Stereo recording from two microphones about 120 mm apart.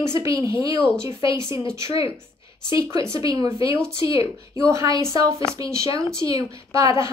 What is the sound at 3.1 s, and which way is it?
A woman's voice, 30° right (ahead or behind).